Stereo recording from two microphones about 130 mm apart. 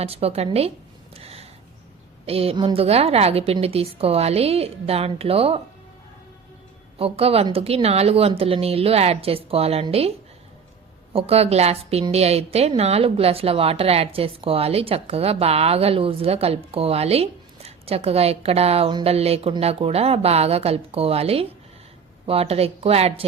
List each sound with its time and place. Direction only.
0.0 s a woman's voice: 50° right (ahead or behind)
1.1 s a sound: 50° right (ahead or behind)
2.2 s a woman's voice: 50° right (ahead or behind)
7.0 s a woman's voice: 50° right (ahead or behind)